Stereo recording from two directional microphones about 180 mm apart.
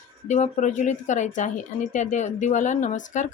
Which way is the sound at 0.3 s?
40° left (ahead or behind).